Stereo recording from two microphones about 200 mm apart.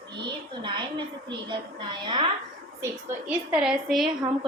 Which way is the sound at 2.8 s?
5° right (ahead or behind).